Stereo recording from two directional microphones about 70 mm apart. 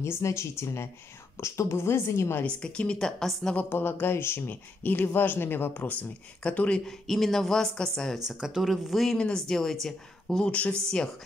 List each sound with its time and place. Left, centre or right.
0.0 s a woman's voice: left
2.4 s speech: centre
3.5 s speech: left
6.9 s speech: centre
8.3 s speech: centre
10.4 s speech: centre